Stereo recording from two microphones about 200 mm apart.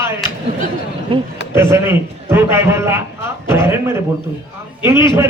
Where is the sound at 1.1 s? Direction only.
25° right (ahead or behind).